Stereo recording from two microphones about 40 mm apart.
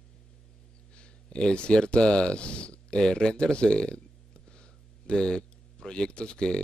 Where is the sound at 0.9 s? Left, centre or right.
Left.